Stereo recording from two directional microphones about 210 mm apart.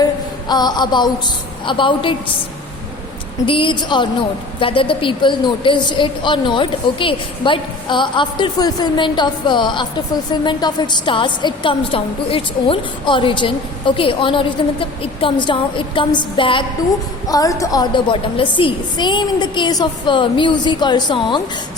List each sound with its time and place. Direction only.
0.0 s a sound: 20° left (ahead or behind)
1.6 s a woman's voice: 25° left (ahead or behind)
3.4 s a woman's voice: 25° left (ahead or behind)